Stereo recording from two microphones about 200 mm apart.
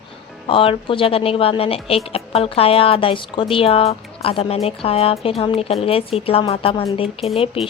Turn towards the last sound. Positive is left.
turn(degrees=25)  # may be behind; listen again after turning